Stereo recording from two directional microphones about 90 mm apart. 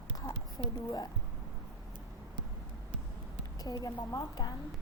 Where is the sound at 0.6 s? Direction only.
45° left (ahead or behind).